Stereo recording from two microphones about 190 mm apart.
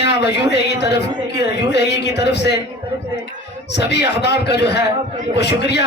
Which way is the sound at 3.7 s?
65° left (ahead or behind).